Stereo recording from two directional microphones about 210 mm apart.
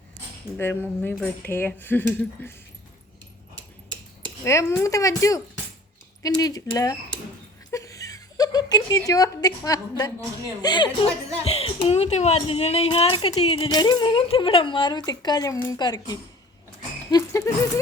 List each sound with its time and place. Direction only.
0.5 s speech: 10° left (ahead or behind)
4.4 s speech: 15° left (ahead or behind)
7.7 s a sound: 15° left (ahead or behind)
10.6 s a woman's voice: 20° left (ahead or behind)
17.1 s music: 15° left (ahead or behind)